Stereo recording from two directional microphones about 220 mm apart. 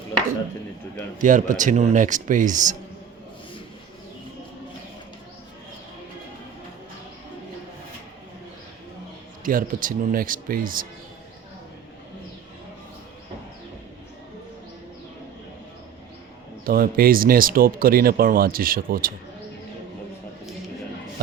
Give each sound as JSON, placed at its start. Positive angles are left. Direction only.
{"t": 1.2, "sound": "speech", "side_deg": -35}
{"t": 9.4, "sound": "speech", "side_deg": -40}
{"t": 16.6, "sound": "speech", "side_deg": -40}